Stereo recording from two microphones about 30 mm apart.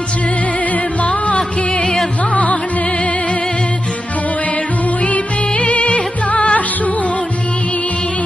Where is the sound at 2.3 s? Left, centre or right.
Left.